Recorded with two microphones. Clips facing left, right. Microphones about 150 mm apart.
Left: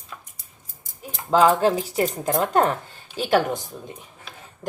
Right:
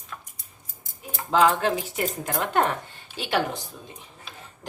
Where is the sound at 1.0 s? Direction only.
40° left (ahead or behind).